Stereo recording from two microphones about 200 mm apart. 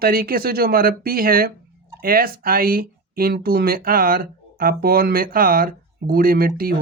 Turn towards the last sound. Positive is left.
turn(degrees=-45)  # may be behind; listen again after turning